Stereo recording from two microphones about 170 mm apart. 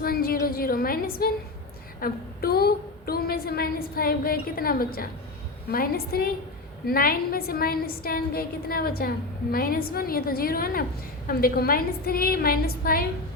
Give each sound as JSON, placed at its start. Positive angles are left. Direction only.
{"t": 0.0, "sound": "a woman's voice", "side_deg": 60}